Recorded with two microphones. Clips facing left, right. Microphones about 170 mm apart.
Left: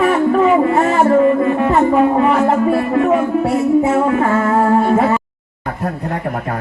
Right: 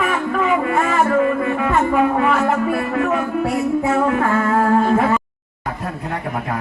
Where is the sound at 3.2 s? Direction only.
25° left (ahead or behind).